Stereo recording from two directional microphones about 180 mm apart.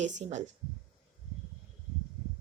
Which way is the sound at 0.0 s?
40° right (ahead or behind).